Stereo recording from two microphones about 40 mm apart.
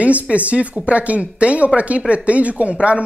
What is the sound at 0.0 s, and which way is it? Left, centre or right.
Speech, right.